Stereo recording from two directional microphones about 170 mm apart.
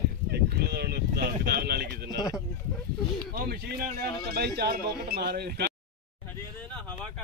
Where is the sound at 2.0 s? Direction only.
20° left (ahead or behind).